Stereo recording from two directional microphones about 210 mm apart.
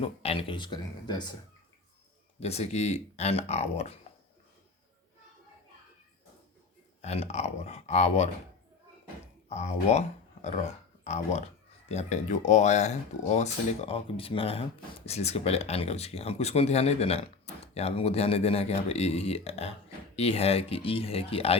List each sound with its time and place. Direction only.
0.0 s speech: 30° left (ahead or behind)
2.4 s speech: 30° left (ahead or behind)
7.0 s speech: 30° left (ahead or behind)
9.5 s speech: 30° left (ahead or behind)